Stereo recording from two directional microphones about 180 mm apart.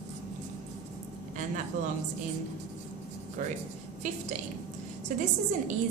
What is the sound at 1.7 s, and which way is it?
Speech, 45° right (ahead or behind).